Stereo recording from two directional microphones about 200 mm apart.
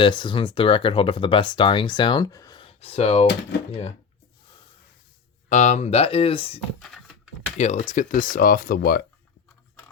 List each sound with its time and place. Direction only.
0.0 s speech: 25° left (ahead or behind)
5.5 s speech: 35° left (ahead or behind)
7.6 s speech: 35° left (ahead or behind)